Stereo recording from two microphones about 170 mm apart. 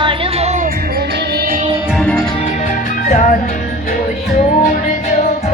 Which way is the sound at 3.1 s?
50° left (ahead or behind).